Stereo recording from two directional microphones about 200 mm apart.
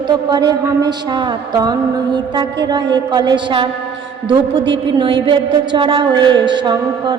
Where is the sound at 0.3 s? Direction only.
20° right (ahead or behind).